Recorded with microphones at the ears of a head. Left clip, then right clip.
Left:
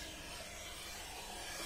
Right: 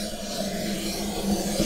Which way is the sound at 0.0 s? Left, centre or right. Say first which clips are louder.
Right 17 dB; right.